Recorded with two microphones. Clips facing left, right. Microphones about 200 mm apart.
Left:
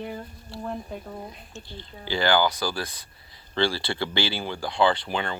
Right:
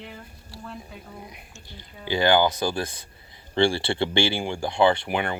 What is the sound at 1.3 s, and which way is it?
Speech, 15° right (ahead or behind).